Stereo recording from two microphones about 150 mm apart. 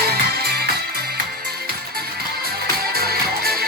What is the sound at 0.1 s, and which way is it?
Music, 90° right.